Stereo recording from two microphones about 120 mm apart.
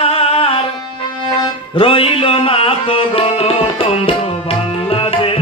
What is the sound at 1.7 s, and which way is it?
Music, 50° left (ahead or behind).